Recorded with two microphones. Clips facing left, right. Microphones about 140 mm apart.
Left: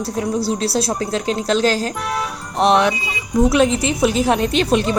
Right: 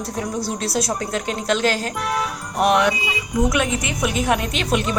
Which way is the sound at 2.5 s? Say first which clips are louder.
Left 3 dB; 25° left (ahead or behind).